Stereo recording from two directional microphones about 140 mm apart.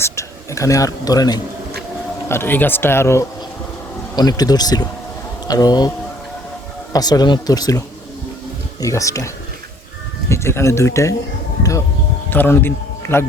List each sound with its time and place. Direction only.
0.0 s speech: 20° left (ahead or behind)
2.3 s speech: 15° left (ahead or behind)
6.9 s speech: 30° left (ahead or behind)
8.8 s speech: 25° left (ahead or behind)
12.3 s speech: 15° left (ahead or behind)